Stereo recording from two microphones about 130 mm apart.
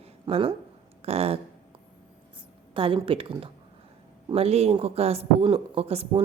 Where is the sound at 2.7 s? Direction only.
45° right (ahead or behind).